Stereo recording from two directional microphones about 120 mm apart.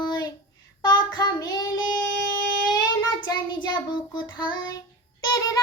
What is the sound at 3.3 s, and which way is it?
Child singing, 40° left (ahead or behind).